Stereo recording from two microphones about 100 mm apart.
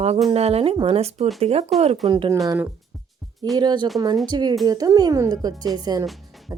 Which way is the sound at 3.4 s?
40° right (ahead or behind).